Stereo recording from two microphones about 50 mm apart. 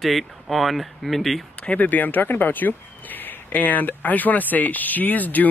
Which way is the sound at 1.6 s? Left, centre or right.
Left.